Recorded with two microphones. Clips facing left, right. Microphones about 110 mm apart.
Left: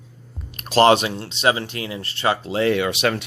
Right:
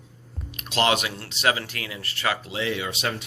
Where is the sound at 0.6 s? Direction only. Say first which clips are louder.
Left 8 dB; 40° left (ahead or behind).